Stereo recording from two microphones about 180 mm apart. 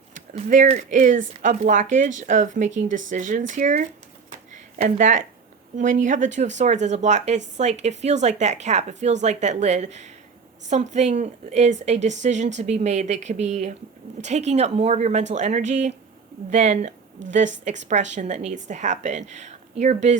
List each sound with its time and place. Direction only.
0.1 s speech: 45° right (ahead or behind)
4.3 s a sound: 40° right (ahead or behind)
5.7 s speech: 45° right (ahead or behind)